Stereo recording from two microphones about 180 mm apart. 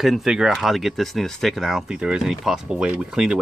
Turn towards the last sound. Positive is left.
turn(degrees=-5)  # may be behind; listen again after turning